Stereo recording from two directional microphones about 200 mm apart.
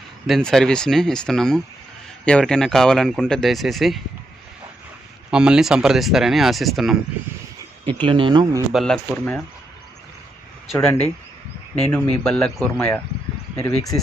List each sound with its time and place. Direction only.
0.3 s speech: centre (ahead or behind)
5.3 s speech: 5° right (ahead or behind)
8.0 s speech: 25° right (ahead or behind)
8.7 s speech: 5° left (ahead or behind)
10.7 s speech: 5° left (ahead or behind)
13.6 s speech: 15° left (ahead or behind)